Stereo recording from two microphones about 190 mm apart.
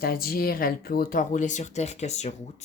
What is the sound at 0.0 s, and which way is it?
Speech, 50° left (ahead or behind).